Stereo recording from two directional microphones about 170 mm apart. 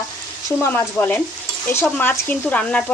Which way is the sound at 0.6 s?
10° left (ahead or behind).